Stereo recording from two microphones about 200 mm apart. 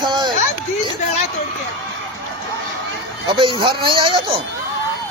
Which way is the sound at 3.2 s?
25° right (ahead or behind).